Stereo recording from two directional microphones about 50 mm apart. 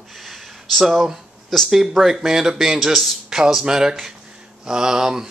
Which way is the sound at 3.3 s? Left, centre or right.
Centre.